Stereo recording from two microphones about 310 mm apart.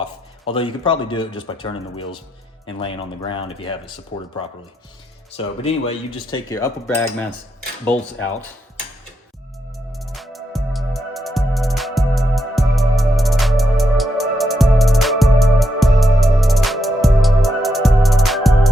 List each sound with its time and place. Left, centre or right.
0.0 s speech: centre
5.6 s speech: centre
9.7 s music: centre